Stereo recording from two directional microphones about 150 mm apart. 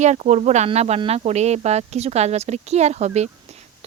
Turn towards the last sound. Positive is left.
turn(degrees=-45)  # may be behind; listen again after turning